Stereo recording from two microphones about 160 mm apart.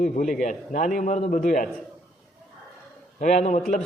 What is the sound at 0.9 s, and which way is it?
Speech, 50° left (ahead or behind).